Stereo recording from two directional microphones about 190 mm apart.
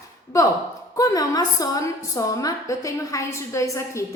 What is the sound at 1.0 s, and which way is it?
A woman's voice, 20° left (ahead or behind).